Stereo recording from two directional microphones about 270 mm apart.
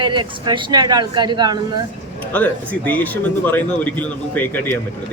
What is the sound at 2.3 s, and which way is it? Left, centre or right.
Speech, centre.